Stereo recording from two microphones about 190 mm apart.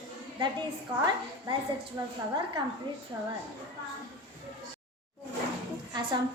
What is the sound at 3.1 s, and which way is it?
Speech, 20° right (ahead or behind).